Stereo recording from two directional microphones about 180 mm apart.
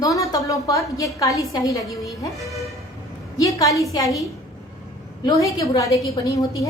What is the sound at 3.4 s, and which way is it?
Speech, 20° left (ahead or behind).